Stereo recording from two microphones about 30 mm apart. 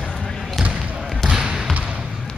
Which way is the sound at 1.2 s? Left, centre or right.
Right.